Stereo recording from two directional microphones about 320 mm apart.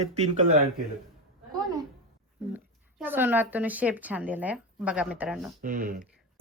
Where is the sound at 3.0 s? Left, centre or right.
Centre.